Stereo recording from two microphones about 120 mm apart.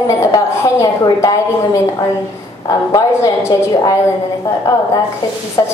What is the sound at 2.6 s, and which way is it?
A woman's voice, 30° left (ahead or behind).